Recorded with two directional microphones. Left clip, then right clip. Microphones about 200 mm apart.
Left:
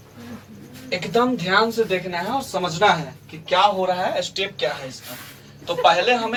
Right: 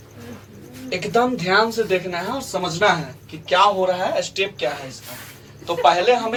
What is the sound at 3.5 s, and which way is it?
A man's voice, 10° right (ahead or behind).